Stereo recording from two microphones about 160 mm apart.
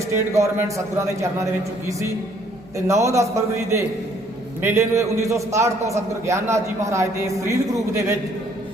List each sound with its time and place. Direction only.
0.2 s a man's voice: 15° right (ahead or behind)
2.7 s a man's voice: 20° right (ahead or behind)